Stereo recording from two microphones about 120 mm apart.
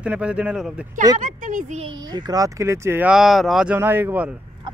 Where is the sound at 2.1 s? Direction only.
35° right (ahead or behind).